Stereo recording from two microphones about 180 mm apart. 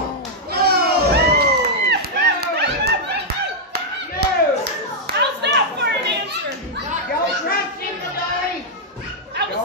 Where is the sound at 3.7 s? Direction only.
65° right (ahead or behind).